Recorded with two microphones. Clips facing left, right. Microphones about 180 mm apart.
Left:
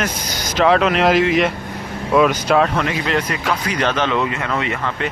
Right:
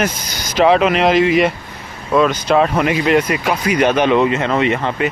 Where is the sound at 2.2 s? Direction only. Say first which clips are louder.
Right 1 dB; 10° left (ahead or behind).